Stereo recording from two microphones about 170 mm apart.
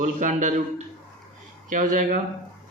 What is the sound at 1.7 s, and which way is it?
Speech, 50° right (ahead or behind).